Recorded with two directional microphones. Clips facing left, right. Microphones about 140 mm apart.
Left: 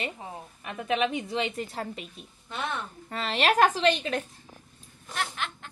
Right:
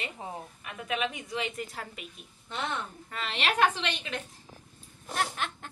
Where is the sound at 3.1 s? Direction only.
40° left (ahead or behind).